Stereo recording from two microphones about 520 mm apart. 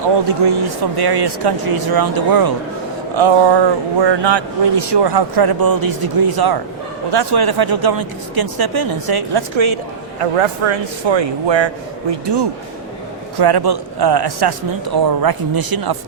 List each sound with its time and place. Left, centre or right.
0.3 s speech: right
3.2 s speech: right
10.2 s a man's voice: right